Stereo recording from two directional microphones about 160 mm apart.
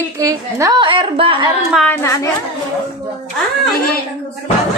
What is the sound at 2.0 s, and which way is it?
Speech, 15° left (ahead or behind).